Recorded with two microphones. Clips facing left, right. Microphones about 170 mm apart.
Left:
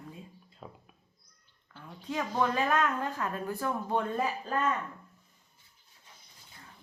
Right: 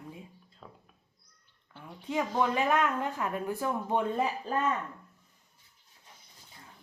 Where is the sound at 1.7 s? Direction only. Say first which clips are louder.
Right 2 dB; 20° right (ahead or behind).